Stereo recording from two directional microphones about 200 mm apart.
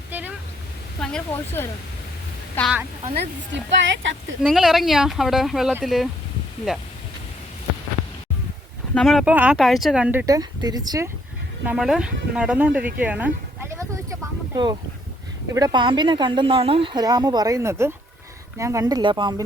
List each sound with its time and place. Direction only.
0.1 s a sound: 10° right (ahead or behind)
1.0 s speech: 5° left (ahead or behind)
3.5 s speech: 65° right (ahead or behind)
4.4 s speech: centre (ahead or behind)
9.0 s speech: centre (ahead or behind); by 11.1 s 20° right (ahead or behind)
11.6 s speech: 5° right (ahead or behind); by 19.4 s 20° right (ahead or behind)